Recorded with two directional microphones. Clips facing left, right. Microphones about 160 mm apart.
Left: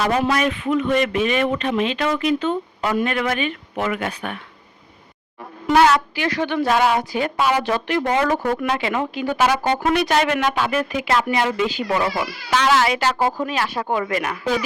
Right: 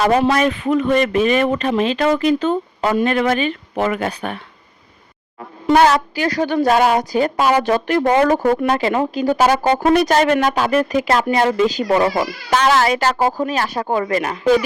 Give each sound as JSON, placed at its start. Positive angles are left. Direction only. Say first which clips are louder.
{"t": 0.2, "sound": "speech", "louder": "right 4 dB", "side_deg": -30}
{"t": 5.7, "sound": "a woman's voice", "louder": "right 2 dB", "side_deg": -40}